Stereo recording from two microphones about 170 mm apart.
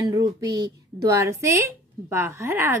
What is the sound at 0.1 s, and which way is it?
A woman's voice, 25° right (ahead or behind).